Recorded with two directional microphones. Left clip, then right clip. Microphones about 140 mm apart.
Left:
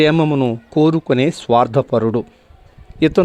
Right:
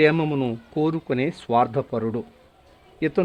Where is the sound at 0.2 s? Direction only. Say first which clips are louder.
Left 8 dB; 30° left (ahead or behind).